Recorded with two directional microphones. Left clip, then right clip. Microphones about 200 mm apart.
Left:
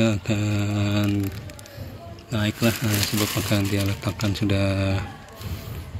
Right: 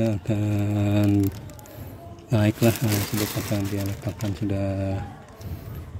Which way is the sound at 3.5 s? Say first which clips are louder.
Left 4 dB; centre (ahead or behind).